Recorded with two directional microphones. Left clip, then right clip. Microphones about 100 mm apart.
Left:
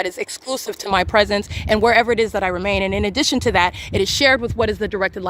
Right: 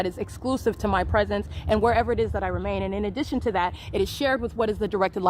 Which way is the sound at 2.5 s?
65° left (ahead or behind).